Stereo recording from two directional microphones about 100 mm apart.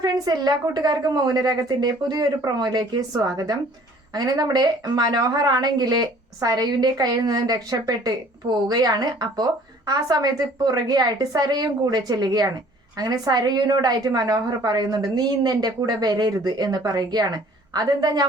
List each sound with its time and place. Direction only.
0.0 s speech: 45° right (ahead or behind)